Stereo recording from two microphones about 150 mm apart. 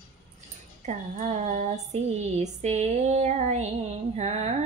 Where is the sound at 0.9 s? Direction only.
55° right (ahead or behind).